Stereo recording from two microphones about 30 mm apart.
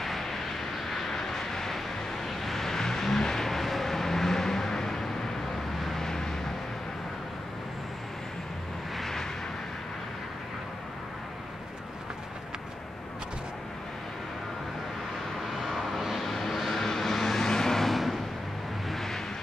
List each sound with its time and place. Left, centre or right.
0.0 s vehicle: centre
6.0 s vehicle: centre
8.9 s vehicle: centre
15.5 s vehicle: centre
16.3 s vehicle: centre
17.9 s music: centre
18.9 s vehicle: centre